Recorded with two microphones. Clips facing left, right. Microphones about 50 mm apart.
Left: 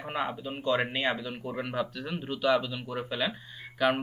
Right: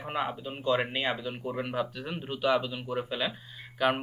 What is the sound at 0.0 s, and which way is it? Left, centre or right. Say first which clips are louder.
Speech: even; centre.